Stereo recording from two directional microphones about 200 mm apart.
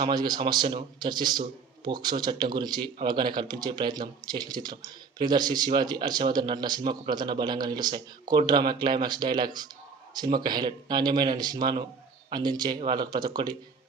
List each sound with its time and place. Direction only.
0.0 s a man's voice: 20° right (ahead or behind)